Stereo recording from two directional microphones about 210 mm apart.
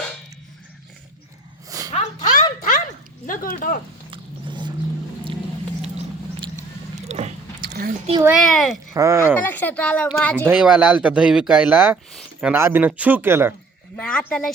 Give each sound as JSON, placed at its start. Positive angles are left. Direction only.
{"t": 1.9, "sound": "a sound", "side_deg": 35}
{"t": 3.2, "sound": "speech", "side_deg": 45}
{"t": 4.1, "sound": "vehicle", "side_deg": -20}
{"t": 7.1, "sound": "biting", "side_deg": -30}
{"t": 7.8, "sound": "a sound", "side_deg": -40}
{"t": 8.2, "sound": "speech", "side_deg": 0}
{"t": 8.9, "sound": "speech", "side_deg": -15}
{"t": 9.4, "sound": "speech", "side_deg": 10}
{"t": 13.9, "sound": "speech", "side_deg": 5}